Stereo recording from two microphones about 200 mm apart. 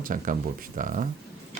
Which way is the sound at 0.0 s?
40° right (ahead or behind).